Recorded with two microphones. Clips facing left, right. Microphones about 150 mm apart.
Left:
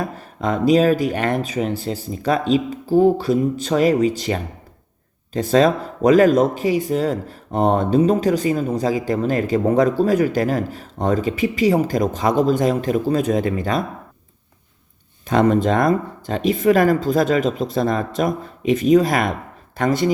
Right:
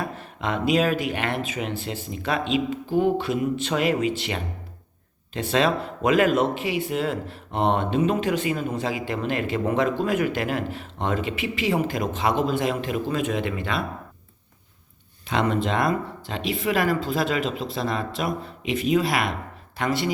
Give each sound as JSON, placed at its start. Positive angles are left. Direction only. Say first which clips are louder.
{"t": 0.0, "sound": "speech", "louder": "left 5 dB", "side_deg": 40}
{"t": 15.3, "sound": "speech", "louder": "left 7 dB", "side_deg": 45}